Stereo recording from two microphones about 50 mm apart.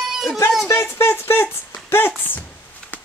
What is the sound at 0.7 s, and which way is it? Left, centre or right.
Speech, left.